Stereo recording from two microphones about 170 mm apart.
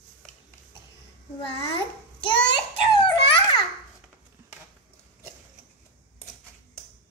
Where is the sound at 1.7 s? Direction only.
30° left (ahead or behind).